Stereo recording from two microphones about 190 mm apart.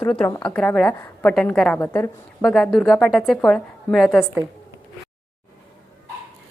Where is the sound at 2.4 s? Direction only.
Centre (ahead or behind).